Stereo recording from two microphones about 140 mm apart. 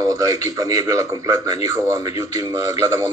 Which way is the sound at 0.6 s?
25° right (ahead or behind).